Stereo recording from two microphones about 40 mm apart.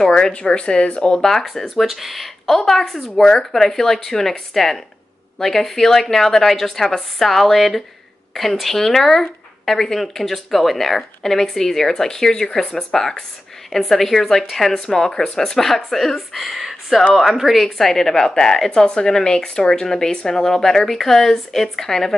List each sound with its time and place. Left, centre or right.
0.0 s speech: centre
0.3 s speech: left; by 17.6 s centre
17.6 s speech: centre